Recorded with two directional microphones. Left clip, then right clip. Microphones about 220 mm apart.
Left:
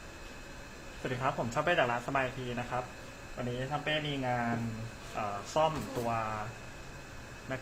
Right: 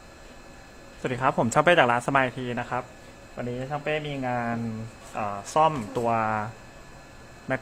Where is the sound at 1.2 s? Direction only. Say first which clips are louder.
Right 11 dB; 55° right (ahead or behind).